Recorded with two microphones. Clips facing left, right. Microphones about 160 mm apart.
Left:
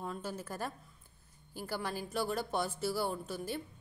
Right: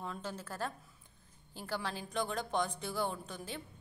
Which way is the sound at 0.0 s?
10° left (ahead or behind).